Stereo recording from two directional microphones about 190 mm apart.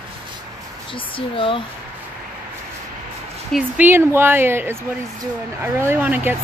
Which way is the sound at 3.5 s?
10° right (ahead or behind).